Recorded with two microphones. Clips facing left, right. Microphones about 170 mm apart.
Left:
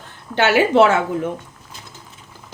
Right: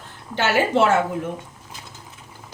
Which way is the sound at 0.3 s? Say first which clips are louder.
Left 5 dB; 70° left (ahead or behind).